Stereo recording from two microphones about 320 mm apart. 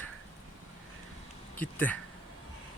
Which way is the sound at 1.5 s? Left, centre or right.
Centre.